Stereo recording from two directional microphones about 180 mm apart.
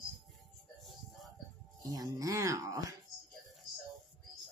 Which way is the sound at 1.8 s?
20° right (ahead or behind).